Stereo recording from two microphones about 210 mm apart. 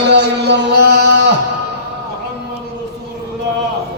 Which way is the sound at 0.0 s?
55° right (ahead or behind).